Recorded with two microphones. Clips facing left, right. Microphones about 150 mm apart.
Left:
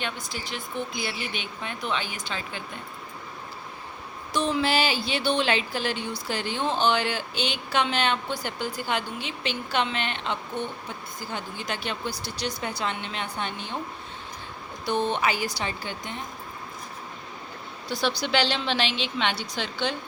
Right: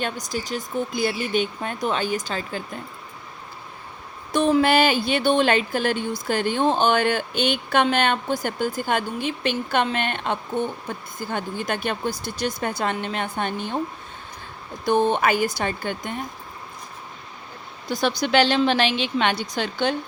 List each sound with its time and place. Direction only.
0.0 s a woman's voice: 45° right (ahead or behind)
4.3 s a woman's voice: 50° right (ahead or behind)
14.8 s a woman's voice: 50° right (ahead or behind)
17.8 s a woman's voice: 45° right (ahead or behind)